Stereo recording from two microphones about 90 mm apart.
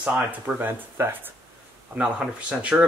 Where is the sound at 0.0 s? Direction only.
10° right (ahead or behind).